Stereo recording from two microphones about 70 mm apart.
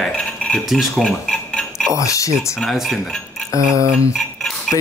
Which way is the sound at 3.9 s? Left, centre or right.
Centre.